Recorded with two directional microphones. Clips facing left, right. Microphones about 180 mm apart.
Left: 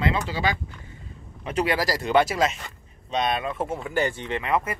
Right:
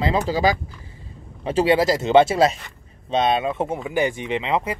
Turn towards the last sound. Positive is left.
turn(degrees=-20)  # may be behind; listen again after turning